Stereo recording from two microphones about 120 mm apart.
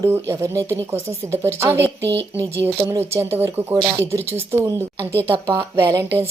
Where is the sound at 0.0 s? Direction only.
25° right (ahead or behind).